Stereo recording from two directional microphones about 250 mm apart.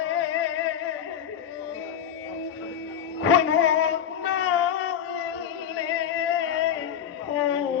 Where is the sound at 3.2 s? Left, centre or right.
Left.